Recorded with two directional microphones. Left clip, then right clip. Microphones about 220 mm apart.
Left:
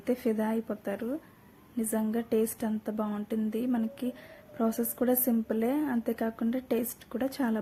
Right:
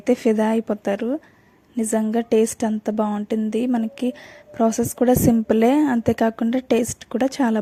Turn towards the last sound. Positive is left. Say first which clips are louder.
# right 11 dB
turn(degrees=-35)  # may be behind; listen again after turning